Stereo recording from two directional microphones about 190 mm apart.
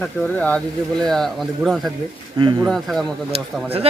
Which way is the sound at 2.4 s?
25° right (ahead or behind).